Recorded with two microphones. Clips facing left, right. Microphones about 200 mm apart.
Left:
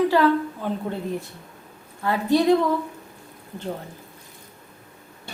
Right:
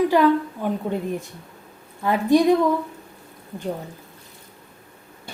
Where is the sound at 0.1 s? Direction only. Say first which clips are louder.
Right 2 dB; 15° right (ahead or behind).